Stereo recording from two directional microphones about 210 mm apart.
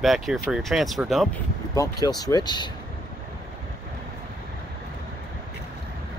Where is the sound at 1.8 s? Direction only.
20° left (ahead or behind).